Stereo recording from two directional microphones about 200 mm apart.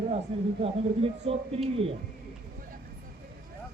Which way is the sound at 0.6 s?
30° right (ahead or behind).